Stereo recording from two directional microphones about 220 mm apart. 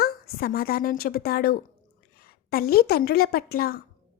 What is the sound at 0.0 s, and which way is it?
A woman's voice, 45° left (ahead or behind).